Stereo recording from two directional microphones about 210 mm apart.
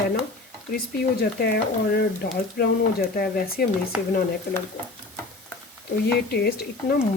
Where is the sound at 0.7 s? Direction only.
50° left (ahead or behind).